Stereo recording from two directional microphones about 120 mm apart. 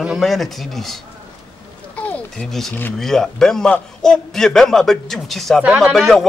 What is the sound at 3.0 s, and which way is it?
A man's voice, 5° left (ahead or behind).